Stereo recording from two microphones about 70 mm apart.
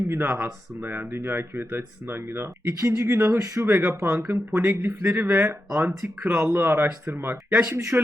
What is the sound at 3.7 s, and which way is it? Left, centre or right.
Speech, right.